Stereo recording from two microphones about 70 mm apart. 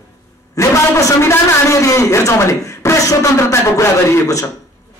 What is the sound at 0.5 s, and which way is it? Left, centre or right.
A man's voice, left.